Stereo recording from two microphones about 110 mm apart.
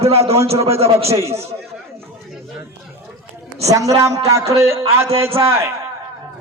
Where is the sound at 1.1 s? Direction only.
25° right (ahead or behind).